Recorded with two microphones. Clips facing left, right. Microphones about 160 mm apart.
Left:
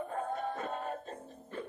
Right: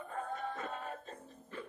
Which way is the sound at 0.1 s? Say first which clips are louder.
Left 4 dB; 45° left (ahead or behind).